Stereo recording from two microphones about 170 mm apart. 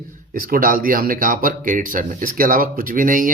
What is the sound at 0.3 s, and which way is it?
Speech, 55° right (ahead or behind).